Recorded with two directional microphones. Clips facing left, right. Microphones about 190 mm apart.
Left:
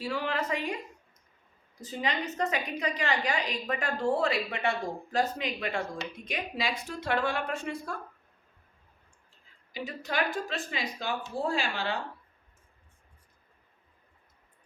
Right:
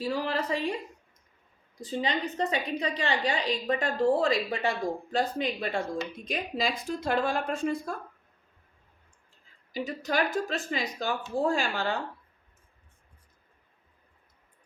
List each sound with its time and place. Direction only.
0.0 s a woman's voice: 35° right (ahead or behind)
1.8 s a woman's voice: 35° right (ahead or behind)
9.7 s speech: 40° right (ahead or behind)